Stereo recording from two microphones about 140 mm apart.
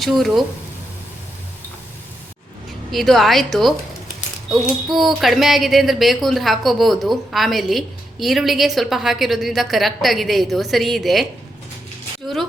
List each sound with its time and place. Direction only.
0.0 s a woman's voice: centre (ahead or behind)
2.9 s a woman's voice: centre (ahead or behind)